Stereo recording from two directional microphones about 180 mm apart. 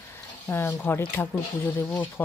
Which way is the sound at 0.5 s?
10° left (ahead or behind).